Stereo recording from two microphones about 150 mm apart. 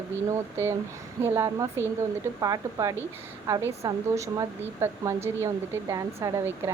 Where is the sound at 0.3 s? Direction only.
15° right (ahead or behind).